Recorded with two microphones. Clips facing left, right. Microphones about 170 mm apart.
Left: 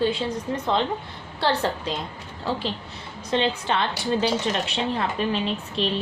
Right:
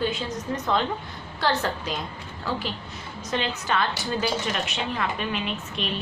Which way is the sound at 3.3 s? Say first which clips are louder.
Left 3 dB; 30° left (ahead or behind).